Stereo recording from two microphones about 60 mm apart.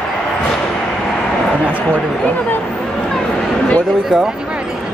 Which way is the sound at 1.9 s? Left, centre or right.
Left.